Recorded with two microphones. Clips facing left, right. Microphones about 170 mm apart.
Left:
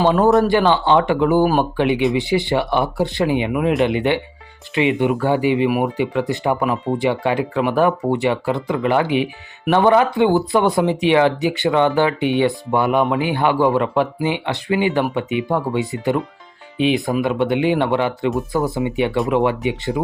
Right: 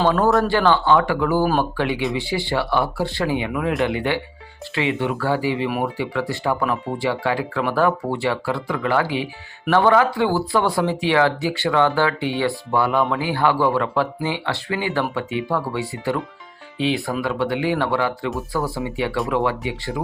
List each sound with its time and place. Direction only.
0.0 s speech: 20° left (ahead or behind)